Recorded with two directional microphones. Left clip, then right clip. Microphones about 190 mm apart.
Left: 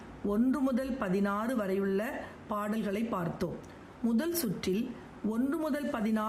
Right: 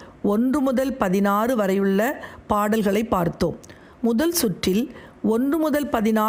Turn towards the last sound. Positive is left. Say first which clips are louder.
# right 12 dB
turn(degrees=-50)  # may be behind; listen again after turning